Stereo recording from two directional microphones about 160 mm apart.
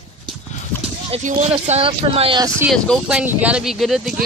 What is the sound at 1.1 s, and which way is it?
Speech, 40° right (ahead or behind).